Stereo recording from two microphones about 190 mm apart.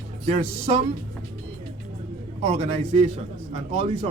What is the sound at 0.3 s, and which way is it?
Speech, 35° right (ahead or behind).